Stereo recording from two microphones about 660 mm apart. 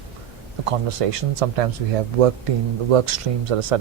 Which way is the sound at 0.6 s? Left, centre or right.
Right.